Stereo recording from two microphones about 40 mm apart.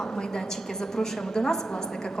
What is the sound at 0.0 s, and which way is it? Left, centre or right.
A man's voice, centre.